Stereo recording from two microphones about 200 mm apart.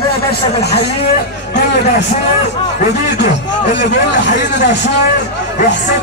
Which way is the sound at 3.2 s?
60° left (ahead or behind).